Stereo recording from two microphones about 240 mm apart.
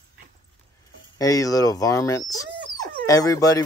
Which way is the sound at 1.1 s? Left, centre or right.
Centre.